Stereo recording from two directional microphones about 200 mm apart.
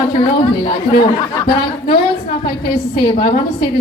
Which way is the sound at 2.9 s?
25° left (ahead or behind).